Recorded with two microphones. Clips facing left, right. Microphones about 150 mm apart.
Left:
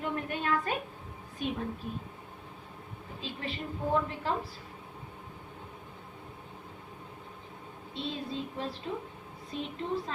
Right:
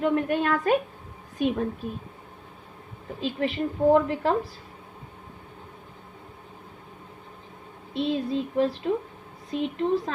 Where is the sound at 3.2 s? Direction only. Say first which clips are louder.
Right 12 dB; 80° right.